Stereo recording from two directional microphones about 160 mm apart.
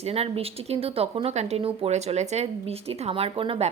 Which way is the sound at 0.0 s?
40° right (ahead or behind).